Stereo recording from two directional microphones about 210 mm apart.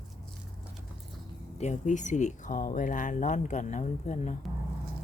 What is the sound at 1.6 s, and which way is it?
Speech, 35° left (ahead or behind).